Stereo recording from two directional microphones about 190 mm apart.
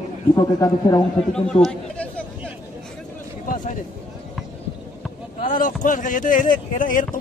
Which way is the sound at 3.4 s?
45° left (ahead or behind).